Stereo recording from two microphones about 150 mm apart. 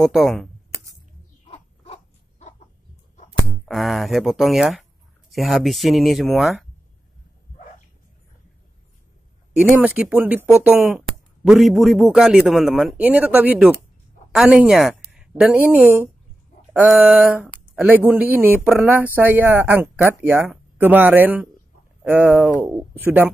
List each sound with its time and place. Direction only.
0.0 s speech: centre (ahead or behind)
1.5 s a sound: 45° left (ahead or behind)
3.4 s speech: centre (ahead or behind)
9.6 s speech: 10° right (ahead or behind)